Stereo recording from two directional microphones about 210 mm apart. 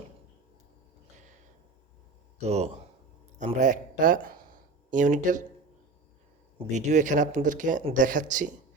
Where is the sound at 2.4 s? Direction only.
30° right (ahead or behind).